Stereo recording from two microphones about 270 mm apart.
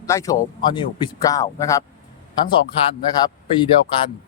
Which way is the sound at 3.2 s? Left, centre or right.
Centre.